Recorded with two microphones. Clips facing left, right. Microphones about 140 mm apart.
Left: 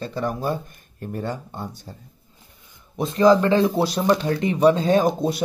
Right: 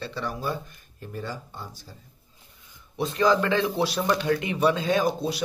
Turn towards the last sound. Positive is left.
turn(degrees=45)  # may be behind; listen again after turning